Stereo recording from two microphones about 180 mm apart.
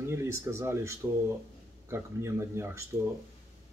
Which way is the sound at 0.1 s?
15° right (ahead or behind).